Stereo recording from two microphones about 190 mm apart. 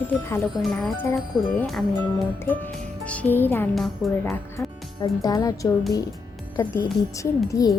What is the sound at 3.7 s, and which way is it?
Speech, centre (ahead or behind).